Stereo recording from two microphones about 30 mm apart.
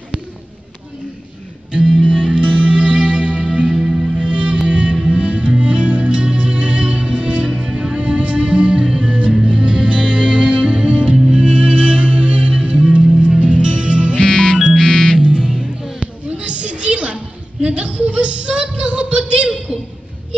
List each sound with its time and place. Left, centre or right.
1.9 s music: right
2.4 s music: right
8.0 s music: right
14.8 s music: centre
15.2 s music: right
16.0 s a sound: right